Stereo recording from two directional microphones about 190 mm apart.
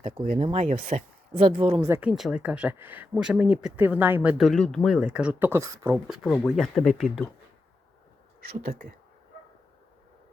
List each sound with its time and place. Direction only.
0.0 s speech: 30° right (ahead or behind)
1.8 s speech: 10° right (ahead or behind)
6.1 s speech: 5° right (ahead or behind)
8.4 s speech: 50° right (ahead or behind)